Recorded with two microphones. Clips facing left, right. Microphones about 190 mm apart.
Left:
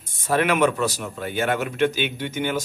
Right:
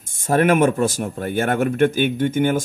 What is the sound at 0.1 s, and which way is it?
Speech, 50° right (ahead or behind).